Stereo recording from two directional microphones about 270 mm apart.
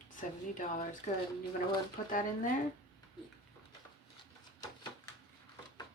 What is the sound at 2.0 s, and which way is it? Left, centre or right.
Speech, left.